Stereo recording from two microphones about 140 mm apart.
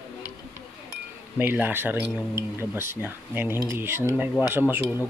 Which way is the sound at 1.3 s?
15° right (ahead or behind).